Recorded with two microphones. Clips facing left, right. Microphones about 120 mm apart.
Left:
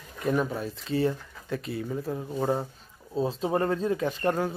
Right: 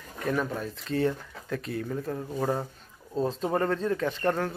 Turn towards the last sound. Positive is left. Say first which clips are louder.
# left 1 dB
turn(degrees=10)  # may be behind; listen again after turning